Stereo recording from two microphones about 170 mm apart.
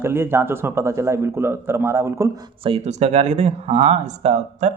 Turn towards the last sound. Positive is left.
turn(degrees=-40)  # may be behind; listen again after turning